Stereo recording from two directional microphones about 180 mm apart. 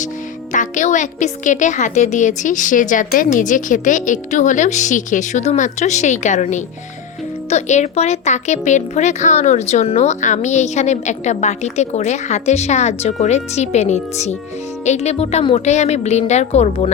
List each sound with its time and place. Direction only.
0.5 s a woman's voice: 45° left (ahead or behind)